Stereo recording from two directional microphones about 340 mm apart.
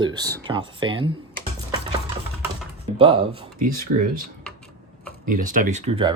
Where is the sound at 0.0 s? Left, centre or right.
Centre.